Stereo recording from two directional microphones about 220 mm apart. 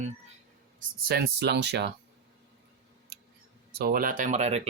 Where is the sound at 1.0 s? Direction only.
45° right (ahead or behind).